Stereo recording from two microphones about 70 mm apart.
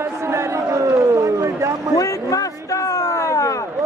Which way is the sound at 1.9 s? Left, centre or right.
Left.